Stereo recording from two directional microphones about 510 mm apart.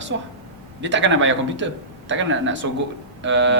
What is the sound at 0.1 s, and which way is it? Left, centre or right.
Speech, right.